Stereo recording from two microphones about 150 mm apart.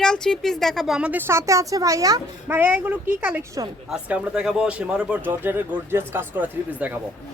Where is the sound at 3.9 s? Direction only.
5° right (ahead or behind).